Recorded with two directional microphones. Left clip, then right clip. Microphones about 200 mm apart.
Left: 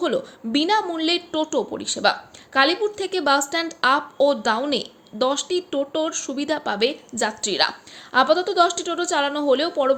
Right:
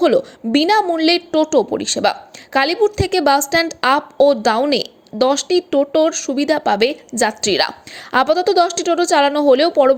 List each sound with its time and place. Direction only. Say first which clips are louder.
0.0 s a woman's voice: right 9 dB; 30° right (ahead or behind)